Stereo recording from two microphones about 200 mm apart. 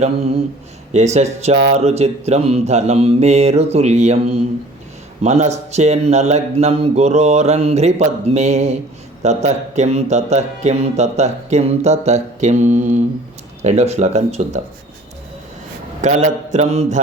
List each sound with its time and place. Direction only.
0.0 s speech: 30° right (ahead or behind)
16.0 s speech: 40° right (ahead or behind)